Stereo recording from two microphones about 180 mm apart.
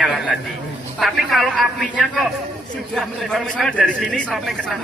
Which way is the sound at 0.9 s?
Centre (ahead or behind).